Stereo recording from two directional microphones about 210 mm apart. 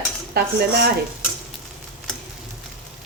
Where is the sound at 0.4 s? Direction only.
45° right (ahead or behind).